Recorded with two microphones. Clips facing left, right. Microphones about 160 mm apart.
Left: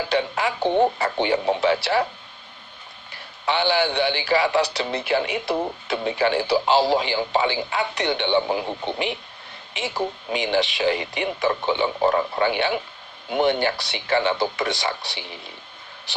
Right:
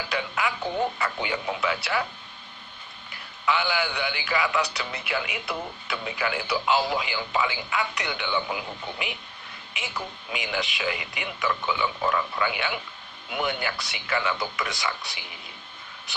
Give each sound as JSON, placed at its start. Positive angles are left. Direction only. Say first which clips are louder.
{"t": 0.1, "sound": "a man's voice", "louder": "left 4 dB", "side_deg": 35}
{"t": 3.4, "sound": "a man's voice", "louder": "left 5 dB", "side_deg": 30}